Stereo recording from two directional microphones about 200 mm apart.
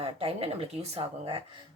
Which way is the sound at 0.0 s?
30° right (ahead or behind).